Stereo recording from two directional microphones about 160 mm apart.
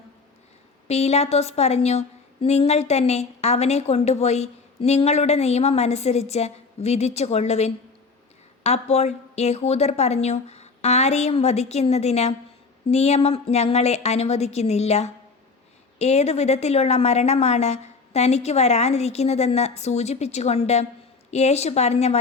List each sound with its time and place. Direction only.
0.9 s a woman's voice: 40° left (ahead or behind)